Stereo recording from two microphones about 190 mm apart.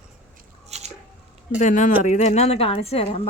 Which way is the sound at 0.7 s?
35° right (ahead or behind).